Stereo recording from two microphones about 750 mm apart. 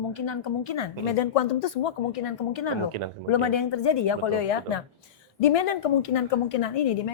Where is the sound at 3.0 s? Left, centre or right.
Right.